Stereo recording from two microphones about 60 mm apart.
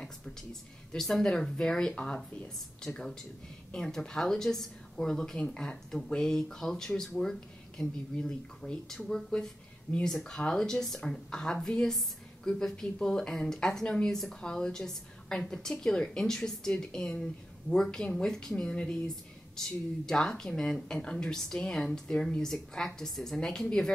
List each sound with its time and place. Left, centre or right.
0.0 s a woman's voice: centre
10.3 s a woman's voice: centre
20.1 s a woman's voice: centre